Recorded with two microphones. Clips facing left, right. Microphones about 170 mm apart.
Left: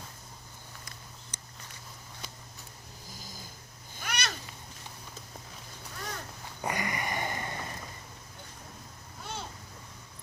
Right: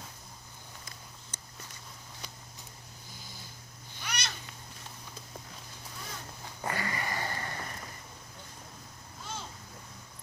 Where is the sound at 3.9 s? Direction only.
50° left (ahead or behind).